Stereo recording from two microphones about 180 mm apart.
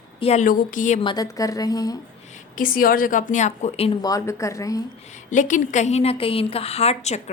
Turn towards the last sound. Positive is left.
turn(degrees=35)  # may be behind; listen again after turning